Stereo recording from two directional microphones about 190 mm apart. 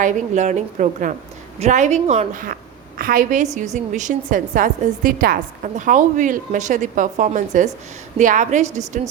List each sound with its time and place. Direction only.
0.0 s a woman's voice: 40° right (ahead or behind)